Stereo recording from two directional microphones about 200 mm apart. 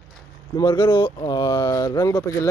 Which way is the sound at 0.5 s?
20° left (ahead or behind).